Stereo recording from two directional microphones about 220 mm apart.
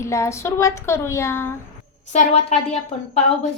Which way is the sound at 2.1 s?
30° left (ahead or behind).